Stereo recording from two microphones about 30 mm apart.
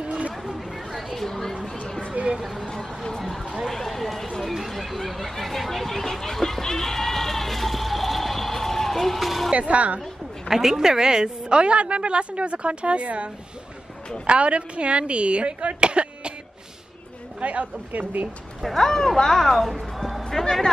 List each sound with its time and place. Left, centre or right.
0.0 s chatter: right
0.5 s a sound: centre
1.1 s a sound: centre
2.7 s a sound: centre
3.6 s run: centre
4.6 s a sound: centre
6.3 s goat: centre
9.5 s speech: right
10.5 s a woman's voice: centre; by 16.3 s right
17.4 s a woman's voice: right
18.8 s a man's voice: centre
20.2 s speech: centre